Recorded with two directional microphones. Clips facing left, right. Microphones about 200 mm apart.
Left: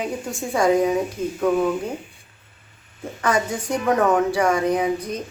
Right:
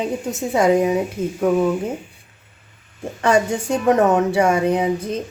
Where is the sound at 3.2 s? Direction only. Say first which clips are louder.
Right 5 dB; 25° right (ahead or behind).